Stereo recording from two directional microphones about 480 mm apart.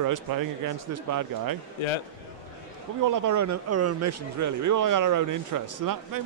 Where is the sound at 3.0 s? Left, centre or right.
Right.